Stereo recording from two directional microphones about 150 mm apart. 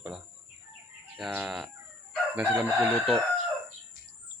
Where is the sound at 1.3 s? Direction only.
5° right (ahead or behind).